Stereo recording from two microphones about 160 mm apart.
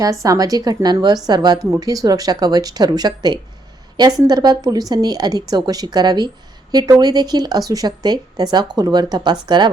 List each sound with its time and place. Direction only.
0.0 s a woman's voice: 20° right (ahead or behind)